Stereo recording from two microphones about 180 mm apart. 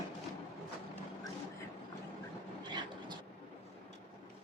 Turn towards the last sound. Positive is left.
turn(degrees=-25)  # may be behind; listen again after turning